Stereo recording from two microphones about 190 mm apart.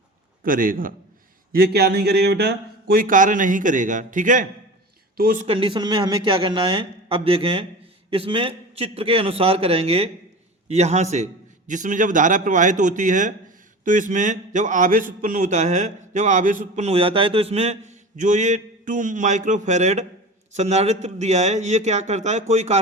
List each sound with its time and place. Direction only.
0.4 s speech: 45° right (ahead or behind)
1.5 s speech: 60° right (ahead or behind)
5.5 s a man's voice: 25° right (ahead or behind)